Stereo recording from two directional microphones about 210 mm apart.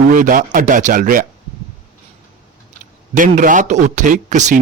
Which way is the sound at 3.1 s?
40° right (ahead or behind).